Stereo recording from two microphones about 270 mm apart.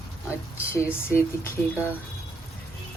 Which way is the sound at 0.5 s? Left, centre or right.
Centre.